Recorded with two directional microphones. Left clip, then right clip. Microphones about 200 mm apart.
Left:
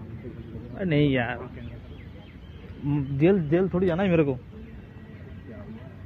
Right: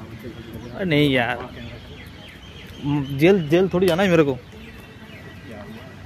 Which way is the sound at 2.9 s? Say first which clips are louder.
Right 5 dB; 25° right (ahead or behind).